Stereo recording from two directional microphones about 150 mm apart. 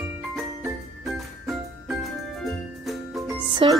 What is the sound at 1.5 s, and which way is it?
Music, centre (ahead or behind).